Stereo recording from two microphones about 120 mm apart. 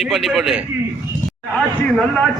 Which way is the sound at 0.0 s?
Centre (ahead or behind).